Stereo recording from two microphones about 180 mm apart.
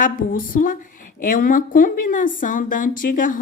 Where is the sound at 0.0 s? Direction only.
50° left (ahead or behind).